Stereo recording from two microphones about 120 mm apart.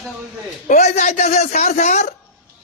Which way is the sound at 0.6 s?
90° left.